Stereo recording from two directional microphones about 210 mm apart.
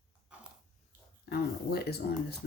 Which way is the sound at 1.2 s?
50° left (ahead or behind).